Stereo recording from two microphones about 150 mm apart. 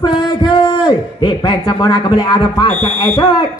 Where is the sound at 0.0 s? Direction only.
30° left (ahead or behind).